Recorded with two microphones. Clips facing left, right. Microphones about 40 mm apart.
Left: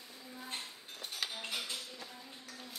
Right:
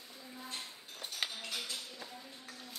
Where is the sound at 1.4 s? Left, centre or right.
Left.